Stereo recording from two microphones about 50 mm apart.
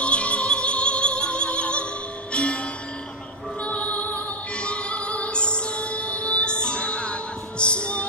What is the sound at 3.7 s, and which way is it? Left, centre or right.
Music, left.